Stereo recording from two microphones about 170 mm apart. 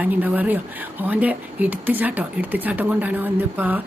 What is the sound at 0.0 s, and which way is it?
Speech, 10° right (ahead or behind).